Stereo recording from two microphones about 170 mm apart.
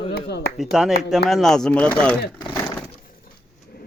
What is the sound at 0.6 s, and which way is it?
Speech, 5° right (ahead or behind).